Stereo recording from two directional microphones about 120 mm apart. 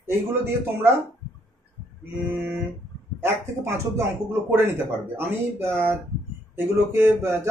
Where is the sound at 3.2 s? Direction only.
20° right (ahead or behind).